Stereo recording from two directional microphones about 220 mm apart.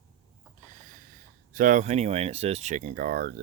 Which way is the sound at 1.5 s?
35° right (ahead or behind).